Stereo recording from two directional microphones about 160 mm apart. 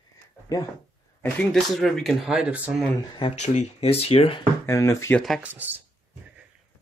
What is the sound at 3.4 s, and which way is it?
Speech, 45° left (ahead or behind).